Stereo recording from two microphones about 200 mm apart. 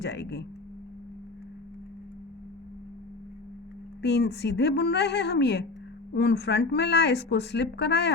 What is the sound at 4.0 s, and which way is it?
Speech, 55° left (ahead or behind).